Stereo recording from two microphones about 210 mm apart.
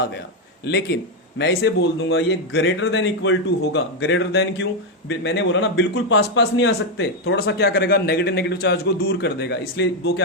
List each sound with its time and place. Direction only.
0.6 s a man's voice: 50° left (ahead or behind)